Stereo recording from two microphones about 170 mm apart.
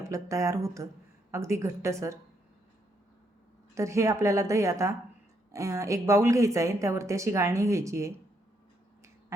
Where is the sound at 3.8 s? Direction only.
15° right (ahead or behind).